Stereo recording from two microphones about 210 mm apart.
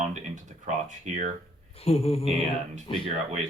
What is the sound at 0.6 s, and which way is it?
Speech, 35° right (ahead or behind).